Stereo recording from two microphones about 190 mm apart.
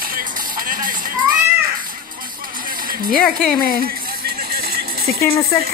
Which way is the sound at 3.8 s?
50° right (ahead or behind).